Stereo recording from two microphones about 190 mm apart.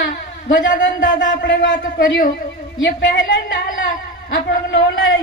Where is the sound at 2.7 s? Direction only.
70° left (ahead or behind).